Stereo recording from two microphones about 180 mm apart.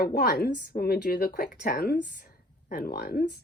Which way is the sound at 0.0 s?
60° left (ahead or behind).